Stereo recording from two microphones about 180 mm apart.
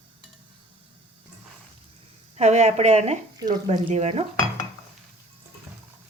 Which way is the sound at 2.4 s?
40° right (ahead or behind).